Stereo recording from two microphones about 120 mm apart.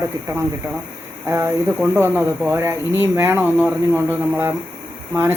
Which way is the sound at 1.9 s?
20° right (ahead or behind).